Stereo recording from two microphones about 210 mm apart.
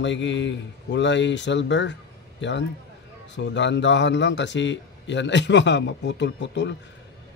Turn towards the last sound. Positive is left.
turn(degrees=55)  # may be behind; listen again after turning